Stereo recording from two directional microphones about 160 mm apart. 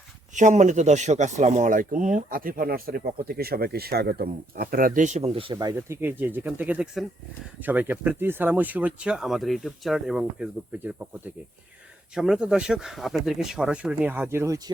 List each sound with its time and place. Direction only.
0.3 s speech: 50° right (ahead or behind)
5.5 s speech: 20° right (ahead or behind); by 10.9 s 5° right (ahead or behind)
12.1 s speech: 5° right (ahead or behind)